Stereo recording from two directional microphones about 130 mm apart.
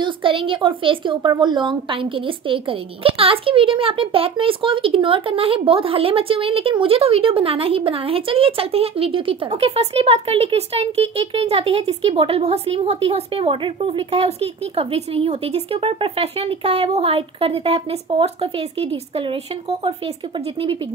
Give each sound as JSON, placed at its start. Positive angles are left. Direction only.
{"t": 0.0, "sound": "a woman's voice", "side_deg": -40}